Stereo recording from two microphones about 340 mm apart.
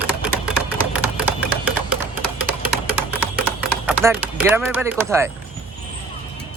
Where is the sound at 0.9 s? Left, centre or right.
Centre.